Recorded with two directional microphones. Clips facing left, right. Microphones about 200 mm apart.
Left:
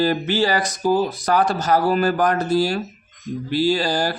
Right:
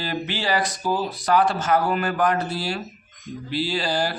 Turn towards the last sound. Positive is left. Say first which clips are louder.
# left 5 dB
turn(degrees=45)  # may be behind; listen again after turning